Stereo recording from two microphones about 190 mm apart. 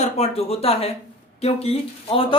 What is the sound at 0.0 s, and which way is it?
Speech, 35° left (ahead or behind).